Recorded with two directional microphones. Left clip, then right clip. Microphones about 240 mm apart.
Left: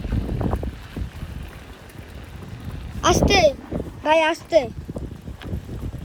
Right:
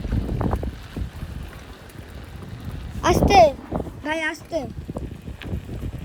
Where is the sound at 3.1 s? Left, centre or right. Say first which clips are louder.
Right 3 dB; centre.